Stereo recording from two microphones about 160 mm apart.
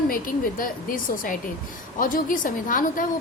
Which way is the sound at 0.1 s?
60° left (ahead or behind).